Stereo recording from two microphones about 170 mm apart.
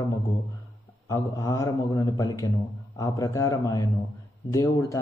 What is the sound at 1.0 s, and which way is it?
Speech, 20° left (ahead or behind).